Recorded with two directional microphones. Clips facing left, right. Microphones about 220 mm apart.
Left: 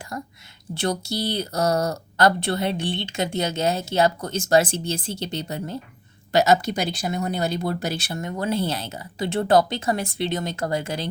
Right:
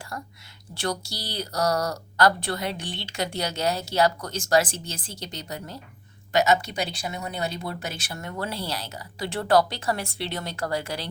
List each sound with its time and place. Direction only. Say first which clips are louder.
0.1 s a woman's voice: left 6 dB; 20° left (ahead or behind)
6.3 s speech: left 3 dB; 40° left (ahead or behind); by 11.1 s 20° left (ahead or behind)